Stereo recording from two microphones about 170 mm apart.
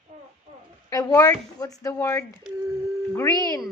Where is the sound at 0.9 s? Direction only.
20° left (ahead or behind).